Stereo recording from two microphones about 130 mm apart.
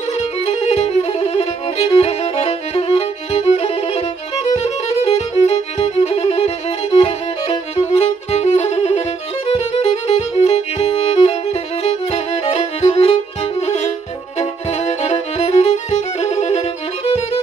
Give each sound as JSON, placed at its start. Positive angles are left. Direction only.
{"t": 0.5, "sound": "music", "side_deg": 55}
{"t": 1.3, "sound": "violin", "side_deg": 50}
{"t": 5.0, "sound": "violin", "side_deg": 55}
{"t": 9.5, "sound": "music", "side_deg": 50}
{"t": 14.4, "sound": "violin", "side_deg": 55}